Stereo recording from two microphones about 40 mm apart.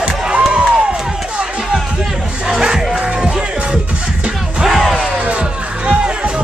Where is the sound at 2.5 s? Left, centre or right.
Centre.